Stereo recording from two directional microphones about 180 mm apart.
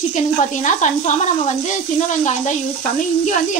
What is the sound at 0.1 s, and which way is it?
A woman's voice, 45° left (ahead or behind).